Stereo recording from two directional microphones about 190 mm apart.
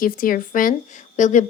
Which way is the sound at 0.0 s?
50° left (ahead or behind).